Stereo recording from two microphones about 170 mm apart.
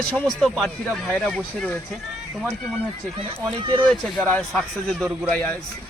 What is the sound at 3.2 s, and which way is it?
Speech, 30° right (ahead or behind).